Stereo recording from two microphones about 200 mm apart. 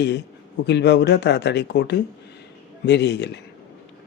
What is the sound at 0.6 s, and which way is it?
Speech, 60° left (ahead or behind).